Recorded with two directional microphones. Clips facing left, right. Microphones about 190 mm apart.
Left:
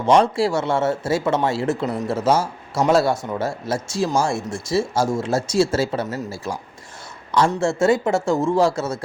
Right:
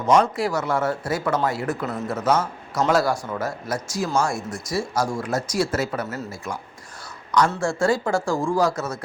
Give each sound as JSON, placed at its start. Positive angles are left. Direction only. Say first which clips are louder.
{"t": 0.0, "sound": "a man's voice", "louder": "left 3 dB", "side_deg": 30}
{"t": 7.3, "sound": "a sound", "louder": "left 1 dB", "side_deg": 30}
{"t": 7.5, "sound": "speech", "louder": "left 4 dB", "side_deg": 25}